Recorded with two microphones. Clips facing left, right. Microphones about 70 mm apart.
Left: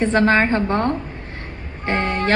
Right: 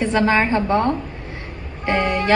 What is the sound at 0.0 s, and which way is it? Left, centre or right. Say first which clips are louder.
Speech: left 1 dB; left.